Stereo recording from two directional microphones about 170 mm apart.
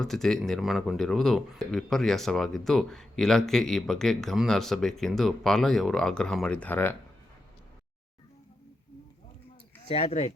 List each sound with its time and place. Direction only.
0.0 s speech: centre (ahead or behind)
9.9 s speech: 35° left (ahead or behind)